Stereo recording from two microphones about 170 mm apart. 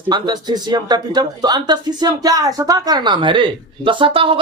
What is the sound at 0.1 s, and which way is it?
Speech, 25° right (ahead or behind).